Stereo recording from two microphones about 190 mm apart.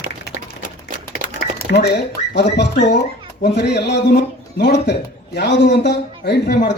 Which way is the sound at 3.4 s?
60° left (ahead or behind).